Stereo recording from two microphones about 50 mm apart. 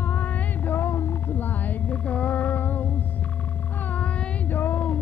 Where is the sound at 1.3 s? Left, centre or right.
Left.